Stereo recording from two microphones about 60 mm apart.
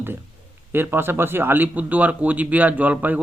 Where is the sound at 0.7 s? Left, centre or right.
Right.